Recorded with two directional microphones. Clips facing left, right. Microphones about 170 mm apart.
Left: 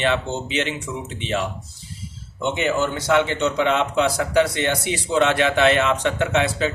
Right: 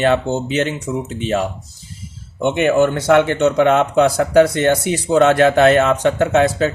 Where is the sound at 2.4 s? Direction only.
55° right (ahead or behind).